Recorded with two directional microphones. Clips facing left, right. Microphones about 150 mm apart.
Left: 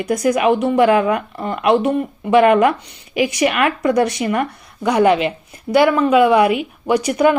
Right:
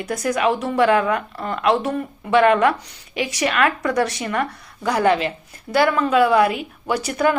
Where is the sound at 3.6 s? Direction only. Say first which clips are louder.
Left 5 dB; 25° left (ahead or behind).